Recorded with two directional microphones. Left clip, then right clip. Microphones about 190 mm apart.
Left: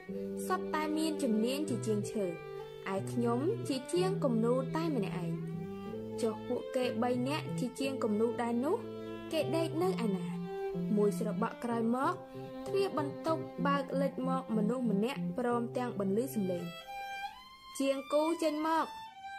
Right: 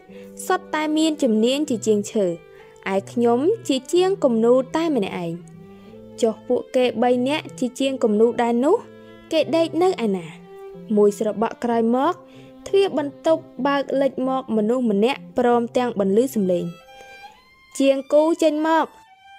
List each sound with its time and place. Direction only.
0.5 s speech: 50° right (ahead or behind)
17.7 s speech: 50° right (ahead or behind)